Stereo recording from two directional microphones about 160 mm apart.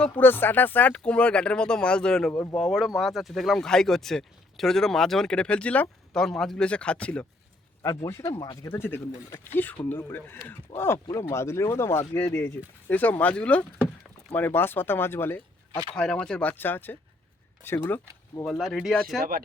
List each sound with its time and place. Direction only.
0.0 s speech: 10° left (ahead or behind)
7.8 s speech: 20° left (ahead or behind)
8.7 s speech: 15° left (ahead or behind)
18.4 s speech: centre (ahead or behind)